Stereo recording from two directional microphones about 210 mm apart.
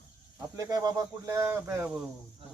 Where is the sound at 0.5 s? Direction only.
15° right (ahead or behind).